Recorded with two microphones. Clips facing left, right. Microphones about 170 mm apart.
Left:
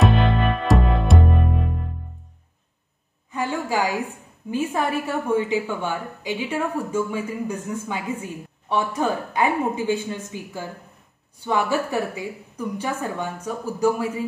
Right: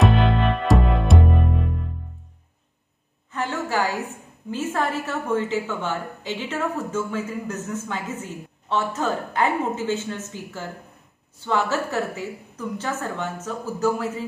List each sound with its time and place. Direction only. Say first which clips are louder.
0.0 s music: even; centre (ahead or behind)
3.3 s a woman's voice: left 2 dB; 10° left (ahead or behind)